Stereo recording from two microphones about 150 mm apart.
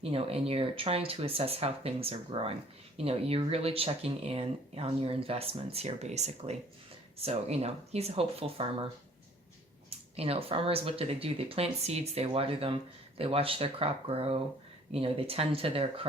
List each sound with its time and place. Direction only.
0.0 s speech: 40° right (ahead or behind)
10.2 s speech: 40° right (ahead or behind)